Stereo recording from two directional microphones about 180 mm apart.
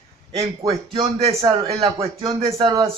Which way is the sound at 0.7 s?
35° right (ahead or behind).